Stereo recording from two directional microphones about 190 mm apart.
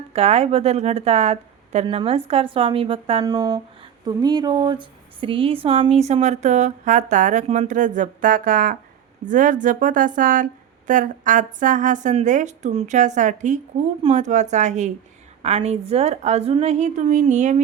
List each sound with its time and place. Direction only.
0.1 s speech: 35° right (ahead or behind)